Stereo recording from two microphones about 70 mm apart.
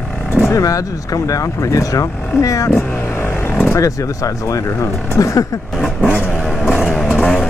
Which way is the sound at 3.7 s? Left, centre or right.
Left.